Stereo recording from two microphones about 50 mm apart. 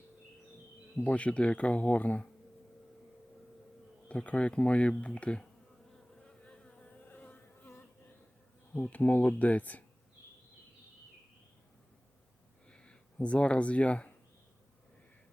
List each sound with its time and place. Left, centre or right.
1.0 s speech: left
4.1 s speech: left
6.2 s bee: centre
7.0 s bee: left
8.8 s speech: left
12.6 s a sound: centre